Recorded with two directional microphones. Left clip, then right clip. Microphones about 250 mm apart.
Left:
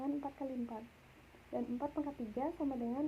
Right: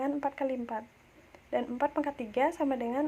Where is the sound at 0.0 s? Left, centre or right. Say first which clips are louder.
Right 10 dB; right.